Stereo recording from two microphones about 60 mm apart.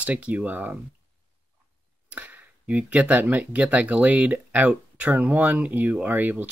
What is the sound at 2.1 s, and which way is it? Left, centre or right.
Speech, right.